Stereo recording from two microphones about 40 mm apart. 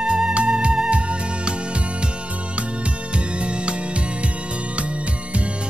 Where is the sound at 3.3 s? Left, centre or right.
Right.